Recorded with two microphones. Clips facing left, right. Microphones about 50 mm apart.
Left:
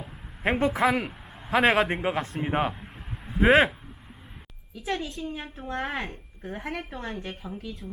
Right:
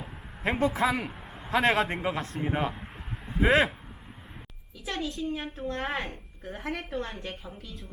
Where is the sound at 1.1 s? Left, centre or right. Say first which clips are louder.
Left 1 dB; centre.